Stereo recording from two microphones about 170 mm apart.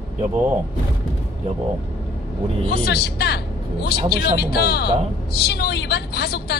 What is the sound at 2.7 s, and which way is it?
A woman's voice, 70° left (ahead or behind).